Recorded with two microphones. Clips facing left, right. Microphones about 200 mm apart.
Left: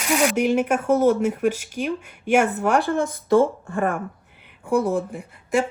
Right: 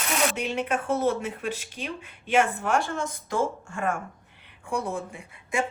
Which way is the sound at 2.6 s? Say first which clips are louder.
Left 6 dB; 60° left (ahead or behind).